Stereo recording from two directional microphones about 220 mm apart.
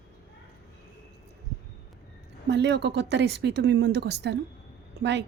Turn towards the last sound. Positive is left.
turn(degrees=-50)  # may be behind; listen again after turning